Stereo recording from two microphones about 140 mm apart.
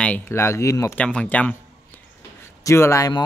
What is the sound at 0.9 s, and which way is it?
Speech, 10° left (ahead or behind).